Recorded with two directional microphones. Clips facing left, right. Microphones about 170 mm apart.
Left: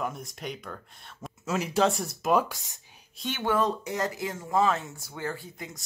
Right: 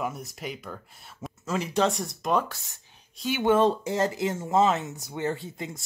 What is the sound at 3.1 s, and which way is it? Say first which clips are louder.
Speech: right 5 dB; 5° right (ahead or behind).